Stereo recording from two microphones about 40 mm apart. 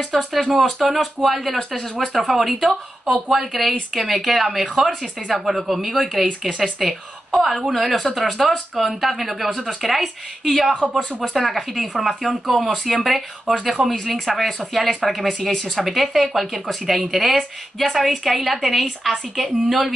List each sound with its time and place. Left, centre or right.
0.1 s a woman's voice: centre